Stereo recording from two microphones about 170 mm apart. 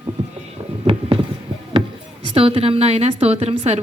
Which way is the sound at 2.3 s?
35° right (ahead or behind).